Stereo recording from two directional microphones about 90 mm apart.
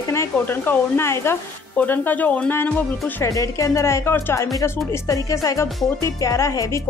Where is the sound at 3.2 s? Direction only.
35° left (ahead or behind).